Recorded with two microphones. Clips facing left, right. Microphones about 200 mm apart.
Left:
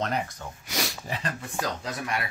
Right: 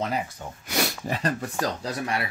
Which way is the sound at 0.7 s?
65° right (ahead or behind).